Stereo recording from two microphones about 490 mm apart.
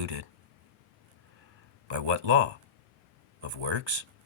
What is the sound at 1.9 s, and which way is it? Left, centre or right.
Speech, right.